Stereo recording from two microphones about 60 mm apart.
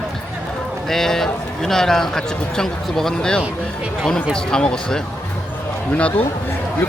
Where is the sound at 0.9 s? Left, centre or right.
Centre.